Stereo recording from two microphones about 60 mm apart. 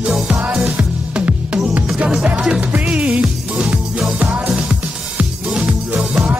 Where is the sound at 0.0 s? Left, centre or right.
Centre.